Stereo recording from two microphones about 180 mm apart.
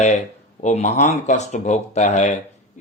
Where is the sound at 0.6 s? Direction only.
40° left (ahead or behind).